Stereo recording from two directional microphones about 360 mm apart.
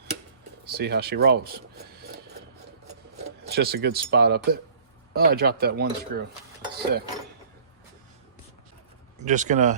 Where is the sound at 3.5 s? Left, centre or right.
Right.